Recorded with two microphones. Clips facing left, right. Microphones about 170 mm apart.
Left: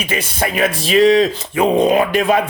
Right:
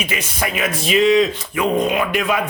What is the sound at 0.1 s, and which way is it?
Speech, 30° left (ahead or behind).